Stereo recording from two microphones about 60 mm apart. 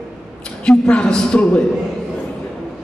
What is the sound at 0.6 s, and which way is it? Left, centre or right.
A woman's voice, centre.